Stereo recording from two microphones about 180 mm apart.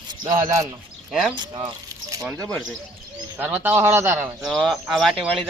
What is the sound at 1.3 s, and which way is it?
Speech, 25° right (ahead or behind).